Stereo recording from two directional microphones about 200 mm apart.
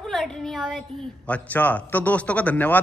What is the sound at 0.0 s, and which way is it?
A woman's voice, centre (ahead or behind).